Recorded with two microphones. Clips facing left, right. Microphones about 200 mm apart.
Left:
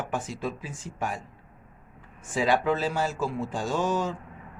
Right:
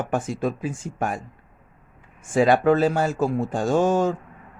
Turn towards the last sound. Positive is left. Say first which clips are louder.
# right 7 dB
turn(degrees=-50)  # may be behind; listen again after turning